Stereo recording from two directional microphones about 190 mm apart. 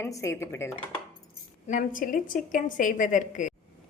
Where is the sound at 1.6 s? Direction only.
45° left (ahead or behind).